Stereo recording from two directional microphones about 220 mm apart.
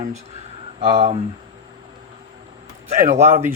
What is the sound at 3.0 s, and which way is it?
Speech, 35° right (ahead or behind).